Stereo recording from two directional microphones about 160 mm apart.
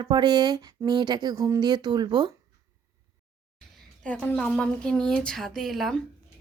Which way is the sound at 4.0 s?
5° left (ahead or behind).